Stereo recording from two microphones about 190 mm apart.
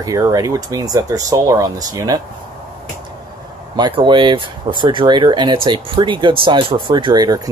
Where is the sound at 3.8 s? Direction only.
25° right (ahead or behind).